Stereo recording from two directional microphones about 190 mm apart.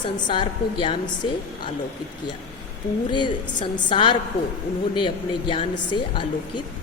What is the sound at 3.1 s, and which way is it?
A woman's voice, 25° left (ahead or behind).